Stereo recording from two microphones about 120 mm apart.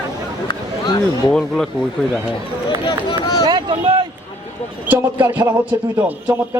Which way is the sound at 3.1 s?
35° left (ahead or behind).